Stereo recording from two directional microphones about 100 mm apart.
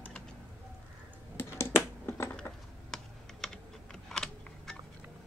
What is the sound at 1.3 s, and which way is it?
Computer keyboard, 25° left (ahead or behind).